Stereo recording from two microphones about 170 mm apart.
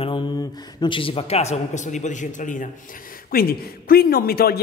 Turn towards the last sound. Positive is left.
turn(degrees=65)  # may be behind; listen again after turning